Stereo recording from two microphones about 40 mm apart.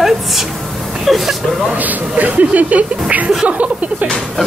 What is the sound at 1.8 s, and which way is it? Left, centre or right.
Speech, right.